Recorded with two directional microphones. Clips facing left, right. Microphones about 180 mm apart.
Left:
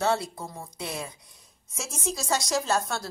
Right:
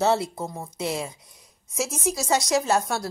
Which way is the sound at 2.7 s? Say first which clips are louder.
Right 4 dB; 15° right (ahead or behind).